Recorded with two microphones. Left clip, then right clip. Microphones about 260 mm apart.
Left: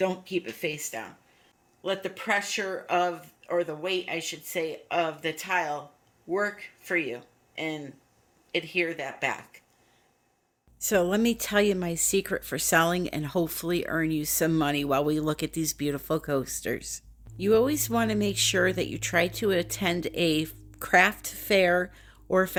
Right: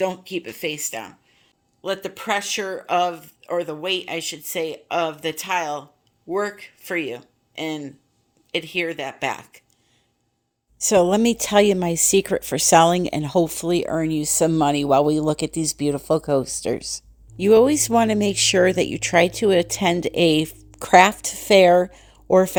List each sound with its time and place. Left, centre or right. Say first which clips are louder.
0.0 s speech: right 4 dB; right
10.8 s speech: right 8 dB; right